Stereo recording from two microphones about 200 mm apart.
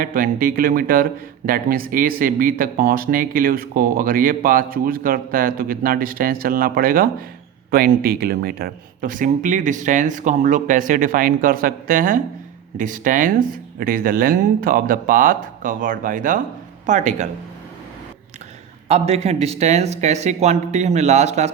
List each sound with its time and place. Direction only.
0.0 s speech: 45° right (ahead or behind)
18.9 s speech: 30° right (ahead or behind)